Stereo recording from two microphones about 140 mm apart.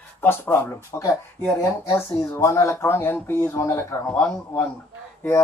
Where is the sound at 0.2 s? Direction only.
15° left (ahead or behind).